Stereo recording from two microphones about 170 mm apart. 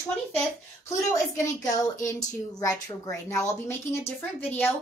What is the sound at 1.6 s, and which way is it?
A woman's voice, 20° left (ahead or behind).